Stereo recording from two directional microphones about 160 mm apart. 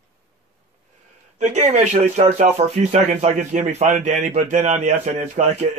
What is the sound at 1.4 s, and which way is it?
Speech, 45° right (ahead or behind).